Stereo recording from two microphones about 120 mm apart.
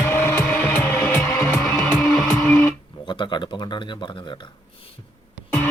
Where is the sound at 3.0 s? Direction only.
40° left (ahead or behind).